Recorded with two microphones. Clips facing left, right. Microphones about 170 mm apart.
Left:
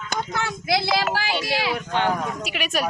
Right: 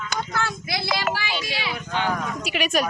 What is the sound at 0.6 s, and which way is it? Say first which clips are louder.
Speech: left 5 dB; 90° left.